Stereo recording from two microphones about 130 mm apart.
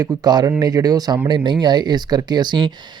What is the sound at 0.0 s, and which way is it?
Speech, 30° right (ahead or behind).